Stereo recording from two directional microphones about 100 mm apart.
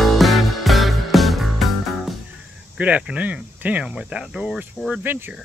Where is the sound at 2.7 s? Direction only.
15° right (ahead or behind).